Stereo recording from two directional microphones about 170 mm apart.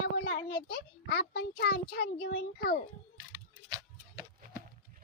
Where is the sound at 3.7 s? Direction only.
20° right (ahead or behind).